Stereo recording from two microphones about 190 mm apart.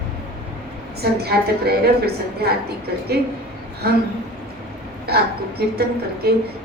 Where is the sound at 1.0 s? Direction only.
55° right (ahead or behind).